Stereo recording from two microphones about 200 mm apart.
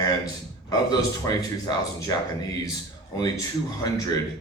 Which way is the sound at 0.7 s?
20° left (ahead or behind).